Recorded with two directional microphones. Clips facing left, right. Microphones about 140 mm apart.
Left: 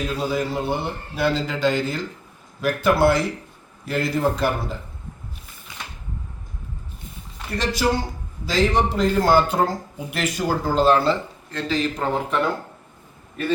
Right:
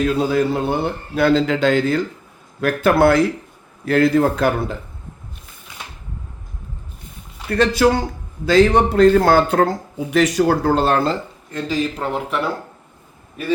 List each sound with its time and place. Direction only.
0.0 s a man's voice: 65° right (ahead or behind)
7.5 s a man's voice: 60° right (ahead or behind)
11.5 s a man's voice: 10° right (ahead or behind)